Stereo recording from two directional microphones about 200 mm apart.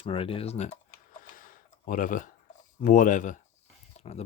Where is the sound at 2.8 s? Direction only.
40° left (ahead or behind).